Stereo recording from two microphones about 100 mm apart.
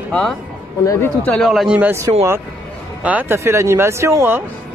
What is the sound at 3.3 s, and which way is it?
Speech, 30° right (ahead or behind).